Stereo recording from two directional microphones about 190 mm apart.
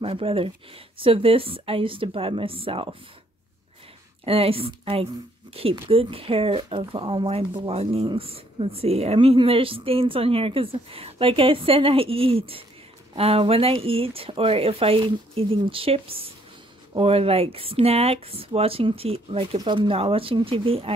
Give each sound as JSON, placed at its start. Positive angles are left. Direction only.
{"t": 0.0, "sound": "speech", "side_deg": -30}
{"t": 4.2, "sound": "speech", "side_deg": -30}